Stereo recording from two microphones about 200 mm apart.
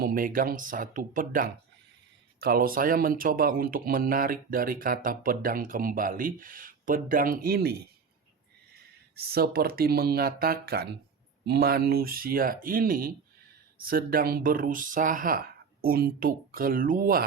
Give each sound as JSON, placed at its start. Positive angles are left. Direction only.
{"t": 0.0, "sound": "speech", "side_deg": -45}
{"t": 9.1, "sound": "speech", "side_deg": -50}